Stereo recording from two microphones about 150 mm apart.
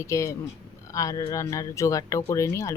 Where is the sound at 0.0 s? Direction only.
20° left (ahead or behind).